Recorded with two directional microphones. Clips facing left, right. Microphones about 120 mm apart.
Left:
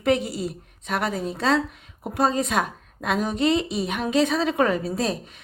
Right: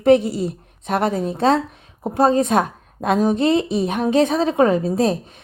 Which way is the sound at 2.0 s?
35° right (ahead or behind).